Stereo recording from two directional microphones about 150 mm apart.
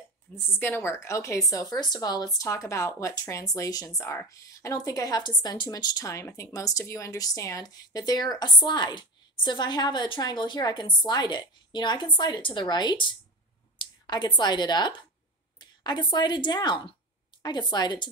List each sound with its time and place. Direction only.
0.6 s a woman's voice: 15° left (ahead or behind); by 18.0 s 30° left (ahead or behind)